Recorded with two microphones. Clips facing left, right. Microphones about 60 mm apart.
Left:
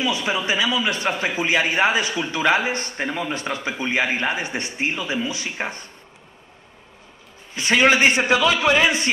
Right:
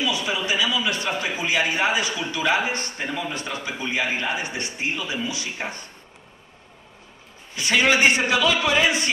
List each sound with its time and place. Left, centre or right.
0.0 s a man's voice: left
3.1 s a man's voice: left
3.3 s a man's voice: left
7.5 s a man's voice: left